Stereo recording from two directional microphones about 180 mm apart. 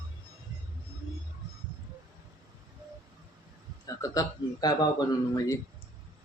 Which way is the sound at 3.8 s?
20° left (ahead or behind).